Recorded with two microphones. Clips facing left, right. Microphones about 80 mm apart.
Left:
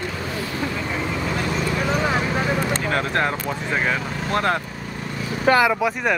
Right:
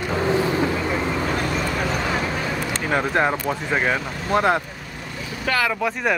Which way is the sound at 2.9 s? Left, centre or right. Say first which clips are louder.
Right 6 dB; centre.